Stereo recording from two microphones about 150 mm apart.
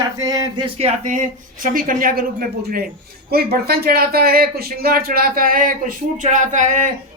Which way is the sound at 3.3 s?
90° right.